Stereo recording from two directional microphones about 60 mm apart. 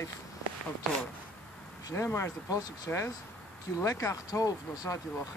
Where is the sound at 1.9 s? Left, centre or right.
Left.